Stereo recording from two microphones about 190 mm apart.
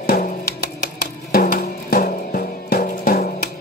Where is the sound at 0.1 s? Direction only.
50° left (ahead or behind).